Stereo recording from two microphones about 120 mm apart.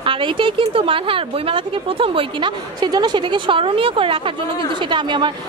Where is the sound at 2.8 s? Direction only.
35° right (ahead or behind).